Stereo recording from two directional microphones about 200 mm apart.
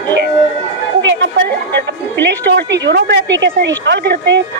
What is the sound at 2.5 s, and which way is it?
A woman's voice, 60° right (ahead or behind).